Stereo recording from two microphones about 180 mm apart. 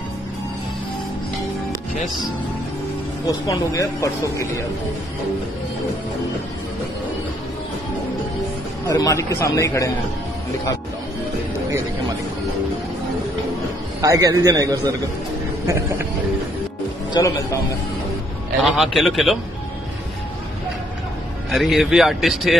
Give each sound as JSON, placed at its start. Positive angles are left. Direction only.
{"t": 3.3, "sound": "speech", "side_deg": 20}
{"t": 8.8, "sound": "speech", "side_deg": 20}
{"t": 14.0, "sound": "a man's voice", "side_deg": -20}
{"t": 17.1, "sound": "a man's voice", "side_deg": 20}
{"t": 18.6, "sound": "a man's voice", "side_deg": 0}
{"t": 21.5, "sound": "a man's voice", "side_deg": 0}